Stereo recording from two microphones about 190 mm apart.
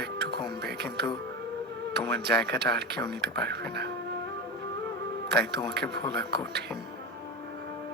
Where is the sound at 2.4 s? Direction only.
60° right (ahead or behind).